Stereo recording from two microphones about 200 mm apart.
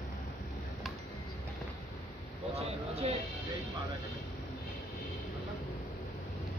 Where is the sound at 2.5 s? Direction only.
30° right (ahead or behind).